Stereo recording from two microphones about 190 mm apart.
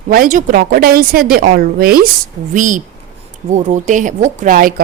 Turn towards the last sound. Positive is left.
turn(degrees=-45)  # may be behind; listen again after turning